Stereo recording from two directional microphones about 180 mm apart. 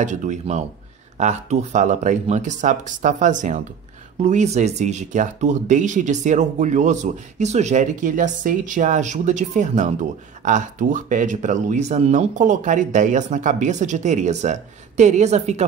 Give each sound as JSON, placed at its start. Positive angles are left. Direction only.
{"t": 0.0, "sound": "speech", "side_deg": -40}